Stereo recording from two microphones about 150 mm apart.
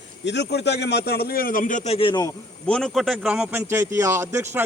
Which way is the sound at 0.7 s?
90° left.